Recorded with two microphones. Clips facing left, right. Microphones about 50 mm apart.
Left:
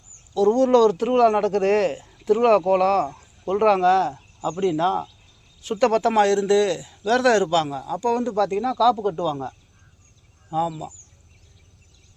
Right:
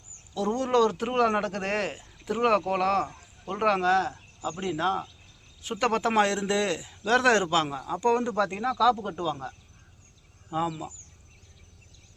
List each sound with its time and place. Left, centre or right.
0.3 s speech: centre
8.0 s speech: right
9.0 s speech: centre
10.5 s speech: right